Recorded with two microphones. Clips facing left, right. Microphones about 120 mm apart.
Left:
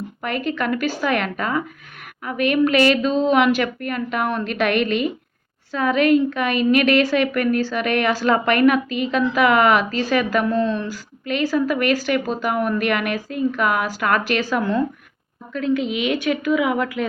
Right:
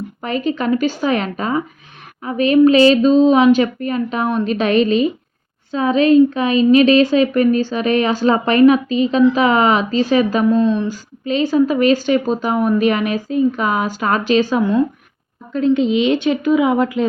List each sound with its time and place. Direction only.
0.2 s a woman's voice: 25° right (ahead or behind)